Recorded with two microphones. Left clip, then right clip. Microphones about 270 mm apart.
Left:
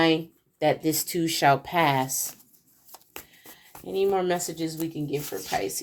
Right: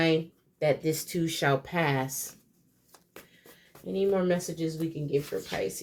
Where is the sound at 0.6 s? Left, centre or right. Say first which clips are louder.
Left 3 dB; left.